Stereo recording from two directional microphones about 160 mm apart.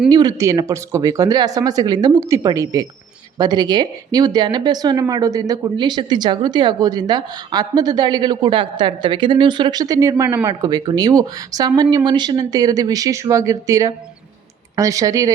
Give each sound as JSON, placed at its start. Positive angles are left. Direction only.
{"t": 0.1, "sound": "speech", "side_deg": -25}